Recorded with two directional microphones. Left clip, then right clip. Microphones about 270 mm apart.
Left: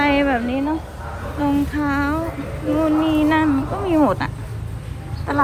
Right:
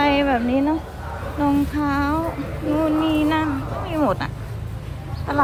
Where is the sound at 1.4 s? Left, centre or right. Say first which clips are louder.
Even; centre.